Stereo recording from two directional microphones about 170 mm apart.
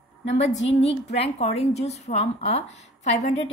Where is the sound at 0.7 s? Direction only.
35° left (ahead or behind).